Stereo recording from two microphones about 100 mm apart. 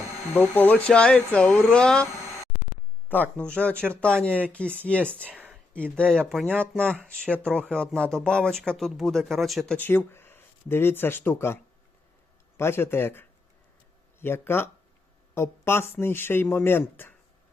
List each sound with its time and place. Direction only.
0.3 s speech: 20° left (ahead or behind)
3.1 s speech: 15° left (ahead or behind)
5.3 s a sound: 10° right (ahead or behind)
5.7 s speech: 10° left (ahead or behind)
9.7 s speech: 20° left (ahead or behind)